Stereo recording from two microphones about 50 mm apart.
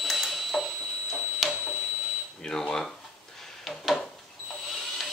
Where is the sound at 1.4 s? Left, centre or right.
Centre.